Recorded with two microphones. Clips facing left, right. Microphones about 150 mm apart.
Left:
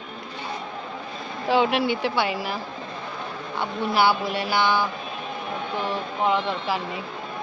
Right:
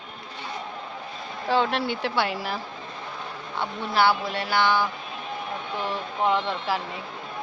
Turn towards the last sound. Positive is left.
turn(degrees=0)  # may be behind; listen again after turning